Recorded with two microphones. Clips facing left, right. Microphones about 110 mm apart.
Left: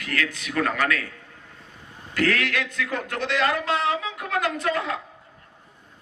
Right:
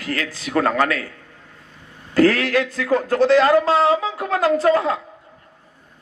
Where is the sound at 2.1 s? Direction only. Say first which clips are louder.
Right 8 dB; 35° right (ahead or behind).